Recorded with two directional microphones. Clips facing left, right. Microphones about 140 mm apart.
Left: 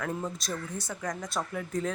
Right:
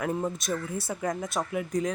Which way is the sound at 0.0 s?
20° right (ahead or behind).